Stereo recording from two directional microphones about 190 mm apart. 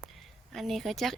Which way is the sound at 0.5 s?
Centre (ahead or behind).